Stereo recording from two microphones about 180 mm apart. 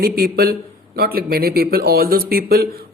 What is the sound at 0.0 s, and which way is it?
Speech, 55° right (ahead or behind).